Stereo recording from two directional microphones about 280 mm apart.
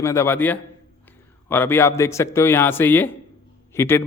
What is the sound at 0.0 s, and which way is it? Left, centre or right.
A man's voice, centre.